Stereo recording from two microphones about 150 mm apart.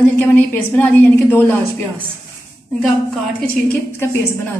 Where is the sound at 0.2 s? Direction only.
10° left (ahead or behind).